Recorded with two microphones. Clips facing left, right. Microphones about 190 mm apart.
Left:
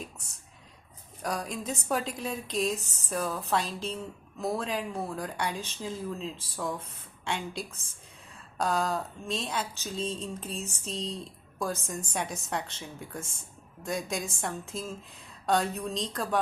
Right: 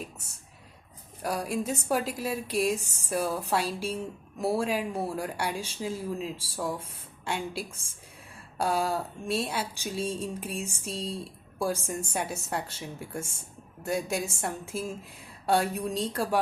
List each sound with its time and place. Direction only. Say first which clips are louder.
1.2 s speech: right 3 dB; 5° right (ahead or behind)